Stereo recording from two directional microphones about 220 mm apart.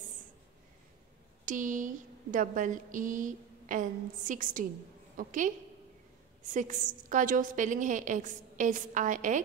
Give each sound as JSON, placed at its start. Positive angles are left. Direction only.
{"t": 1.4, "sound": "a woman's voice", "side_deg": -35}
{"t": 6.5, "sound": "a woman's voice", "side_deg": -35}